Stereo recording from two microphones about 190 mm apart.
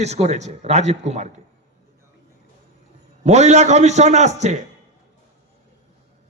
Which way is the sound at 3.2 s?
35° right (ahead or behind).